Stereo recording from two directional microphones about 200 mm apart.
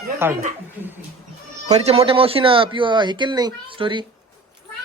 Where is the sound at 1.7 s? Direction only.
30° right (ahead or behind).